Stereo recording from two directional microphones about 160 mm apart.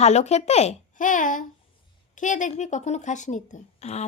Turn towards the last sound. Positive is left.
turn(degrees=45)  # may be behind; listen again after turning